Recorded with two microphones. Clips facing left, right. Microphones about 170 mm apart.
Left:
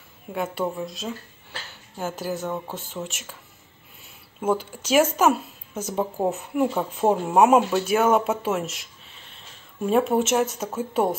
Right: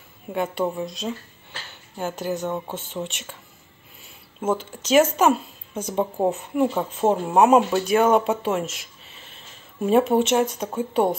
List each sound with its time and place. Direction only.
0.3 s speech: centre (ahead or behind)
4.4 s speech: 10° left (ahead or behind)